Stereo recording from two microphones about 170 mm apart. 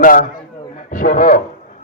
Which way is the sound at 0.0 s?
55° left (ahead or behind).